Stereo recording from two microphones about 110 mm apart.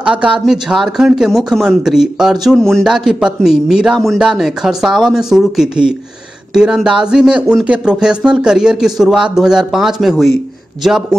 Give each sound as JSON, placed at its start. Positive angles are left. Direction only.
{"t": 0.0, "sound": "speech", "side_deg": -10}
{"t": 2.8, "sound": "speech", "side_deg": -5}